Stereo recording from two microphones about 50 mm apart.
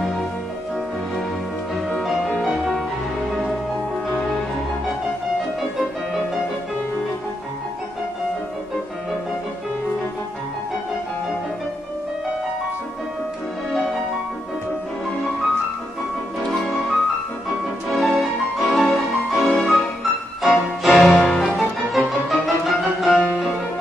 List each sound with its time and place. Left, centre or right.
2.4 s music: centre
17.8 s music: centre
23.0 s music: right